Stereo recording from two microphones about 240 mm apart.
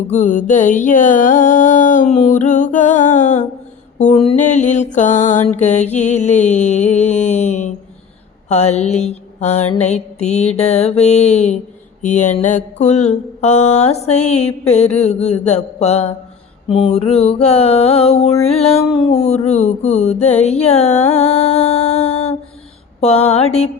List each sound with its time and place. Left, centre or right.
0.1 s a sound: left
3.9 s mantra: left
6.9 s a sound: left
8.4 s mantra: left
21.1 s music: left
23.0 s mantra: left